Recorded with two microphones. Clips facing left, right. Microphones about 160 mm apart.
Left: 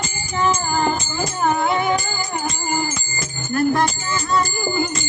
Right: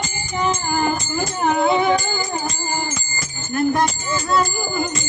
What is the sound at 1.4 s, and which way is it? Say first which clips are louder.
Speech: right 2 dB; 20° right (ahead or behind).